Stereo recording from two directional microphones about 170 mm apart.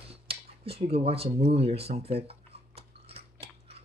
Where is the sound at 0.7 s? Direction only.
35° right (ahead or behind).